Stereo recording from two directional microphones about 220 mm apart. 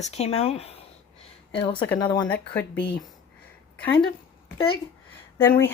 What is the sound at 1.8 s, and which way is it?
Speech, 10° left (ahead or behind).